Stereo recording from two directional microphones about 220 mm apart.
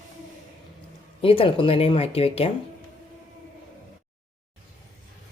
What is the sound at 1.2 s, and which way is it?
Speech, 25° left (ahead or behind).